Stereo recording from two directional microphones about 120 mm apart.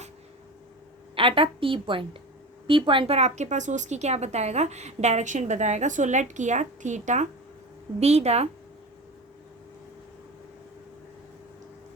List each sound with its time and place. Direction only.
1.1 s a woman's voice: 45° right (ahead or behind)
3.2 s a woman's voice: 70° right (ahead or behind); by 7.3 s 85° right
7.9 s speech: 60° right (ahead or behind)